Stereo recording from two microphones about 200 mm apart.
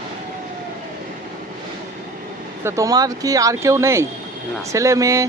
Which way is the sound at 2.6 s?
15° right (ahead or behind).